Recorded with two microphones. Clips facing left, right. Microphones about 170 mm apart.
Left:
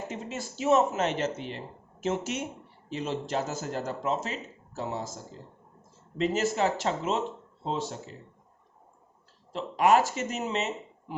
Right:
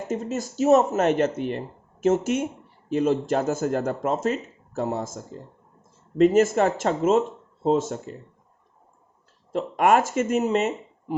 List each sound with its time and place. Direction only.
0.1 s speech: 45° right (ahead or behind)
9.5 s speech: 50° right (ahead or behind)